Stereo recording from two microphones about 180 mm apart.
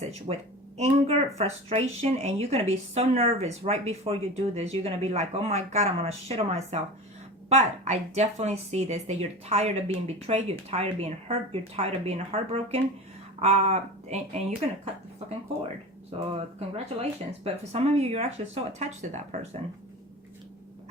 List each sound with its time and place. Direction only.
0.0 s speech: 35° right (ahead or behind)
16.1 s speech: 35° right (ahead or behind)